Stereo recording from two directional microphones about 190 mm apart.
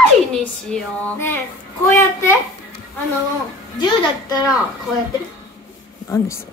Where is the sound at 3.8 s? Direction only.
20° left (ahead or behind).